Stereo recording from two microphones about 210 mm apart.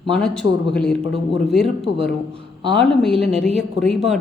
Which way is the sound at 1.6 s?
30° right (ahead or behind).